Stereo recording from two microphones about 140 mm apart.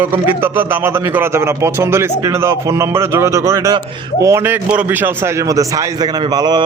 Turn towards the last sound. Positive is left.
turn(degrees=-30)  # may be behind; listen again after turning